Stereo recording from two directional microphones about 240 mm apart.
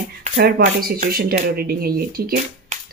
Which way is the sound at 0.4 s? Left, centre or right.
Right.